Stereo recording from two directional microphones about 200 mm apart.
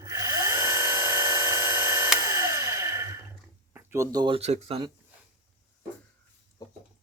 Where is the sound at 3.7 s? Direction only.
15° right (ahead or behind).